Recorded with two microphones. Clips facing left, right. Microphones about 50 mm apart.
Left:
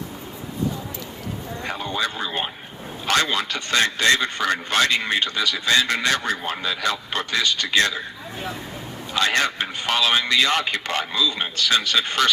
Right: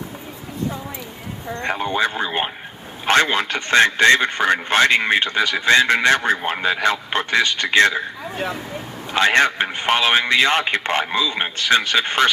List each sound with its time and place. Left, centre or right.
1.7 s a man's voice: right
9.1 s a man's voice: right